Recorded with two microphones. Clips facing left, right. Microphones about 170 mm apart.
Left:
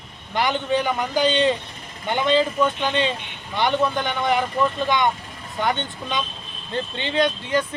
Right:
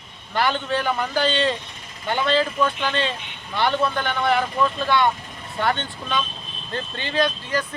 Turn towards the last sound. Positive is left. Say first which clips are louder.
# left 2 dB
turn(degrees=20)  # may be behind; listen again after turning